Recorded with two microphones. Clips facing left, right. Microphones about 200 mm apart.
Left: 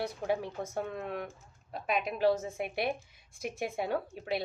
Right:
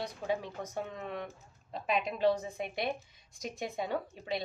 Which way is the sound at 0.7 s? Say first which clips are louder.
Left 3 dB; 55° left (ahead or behind).